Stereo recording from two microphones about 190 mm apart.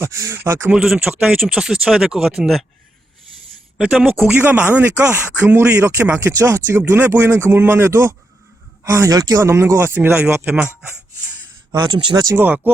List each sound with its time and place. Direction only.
0.0 s speech: 15° right (ahead or behind)
0.8 s speech: centre (ahead or behind)
3.8 s speech: 5° right (ahead or behind)
11.7 s speech: 25° right (ahead or behind); by 12.7 s 10° right (ahead or behind)